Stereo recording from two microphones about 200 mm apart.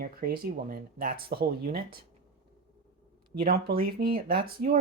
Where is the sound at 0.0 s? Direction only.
50° right (ahead or behind).